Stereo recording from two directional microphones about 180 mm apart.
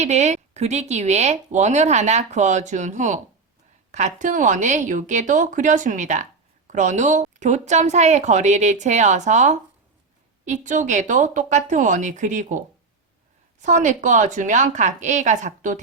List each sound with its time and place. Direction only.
0.0 s a woman's voice: 40° right (ahead or behind)